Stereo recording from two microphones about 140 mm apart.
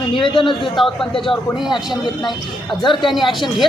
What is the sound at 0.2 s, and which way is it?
Speech, 35° left (ahead or behind).